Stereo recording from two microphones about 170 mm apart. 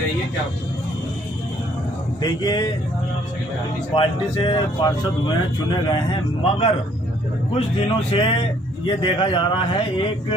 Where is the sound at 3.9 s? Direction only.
30° left (ahead or behind).